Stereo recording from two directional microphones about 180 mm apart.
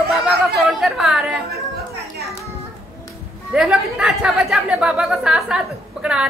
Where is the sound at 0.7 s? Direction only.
Centre (ahead or behind).